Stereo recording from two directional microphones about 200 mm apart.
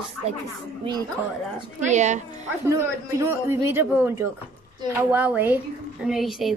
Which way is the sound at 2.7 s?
15° right (ahead or behind).